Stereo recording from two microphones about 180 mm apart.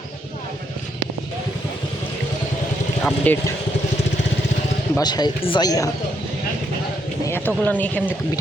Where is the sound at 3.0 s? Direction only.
Centre (ahead or behind).